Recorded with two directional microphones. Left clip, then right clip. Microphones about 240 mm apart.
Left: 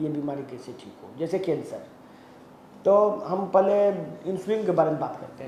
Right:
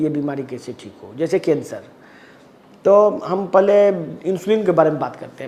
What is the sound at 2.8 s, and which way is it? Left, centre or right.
A man's voice, right.